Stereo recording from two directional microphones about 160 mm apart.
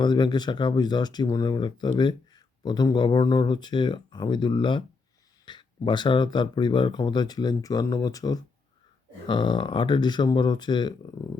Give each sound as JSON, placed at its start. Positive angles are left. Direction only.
{"t": 0.0, "sound": "speech", "side_deg": 30}